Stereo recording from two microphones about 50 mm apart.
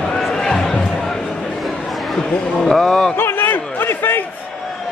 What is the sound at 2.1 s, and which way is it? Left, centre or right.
Speech, centre.